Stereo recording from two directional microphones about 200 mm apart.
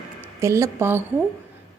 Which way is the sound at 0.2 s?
15° right (ahead or behind).